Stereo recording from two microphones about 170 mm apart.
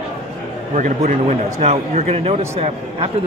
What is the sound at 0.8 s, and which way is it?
A man's voice, 40° right (ahead or behind).